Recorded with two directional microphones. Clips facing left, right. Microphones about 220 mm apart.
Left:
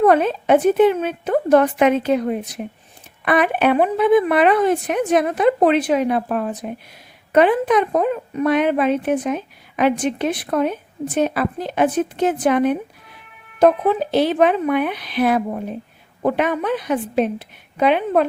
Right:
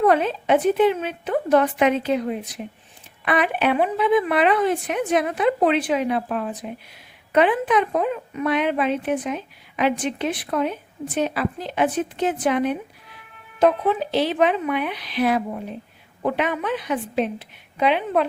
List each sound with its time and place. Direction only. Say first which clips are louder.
0.1 s speech: left 4 dB; 50° left (ahead or behind)